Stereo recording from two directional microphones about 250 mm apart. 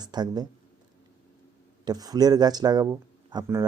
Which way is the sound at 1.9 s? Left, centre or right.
Centre.